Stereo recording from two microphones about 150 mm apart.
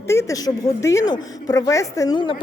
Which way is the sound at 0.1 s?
20° left (ahead or behind).